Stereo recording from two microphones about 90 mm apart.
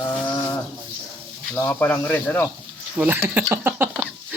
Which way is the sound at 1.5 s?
20° left (ahead or behind).